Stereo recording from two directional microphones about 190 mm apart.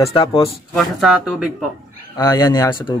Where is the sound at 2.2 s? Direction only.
20° left (ahead or behind).